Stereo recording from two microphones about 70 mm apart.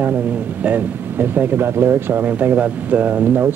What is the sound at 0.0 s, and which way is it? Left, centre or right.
Speech, right.